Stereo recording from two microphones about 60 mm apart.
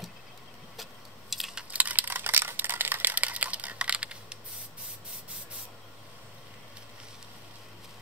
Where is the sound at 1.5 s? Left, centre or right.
Centre.